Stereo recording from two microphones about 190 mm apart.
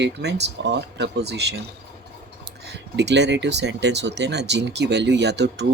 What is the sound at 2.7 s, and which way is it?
Speech, 65° right (ahead or behind).